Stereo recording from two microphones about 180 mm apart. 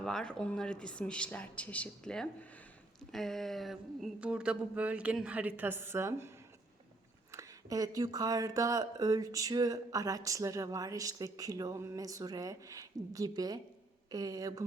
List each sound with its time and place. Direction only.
0.0 s a woman's voice: 5° left (ahead or behind); by 14.6 s 20° right (ahead or behind)